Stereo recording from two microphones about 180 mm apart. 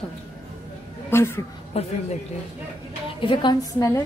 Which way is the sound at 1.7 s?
35° left (ahead or behind).